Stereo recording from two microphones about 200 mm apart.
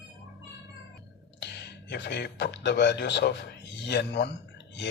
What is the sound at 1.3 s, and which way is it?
Speech, 60° left (ahead or behind).